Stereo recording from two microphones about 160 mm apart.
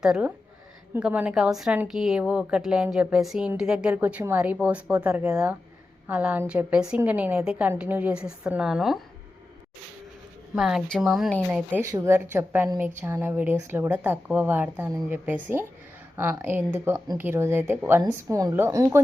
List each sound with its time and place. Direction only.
0.0 s a woman's voice: 5° right (ahead or behind)
10.5 s a woman's voice: 5° right (ahead or behind)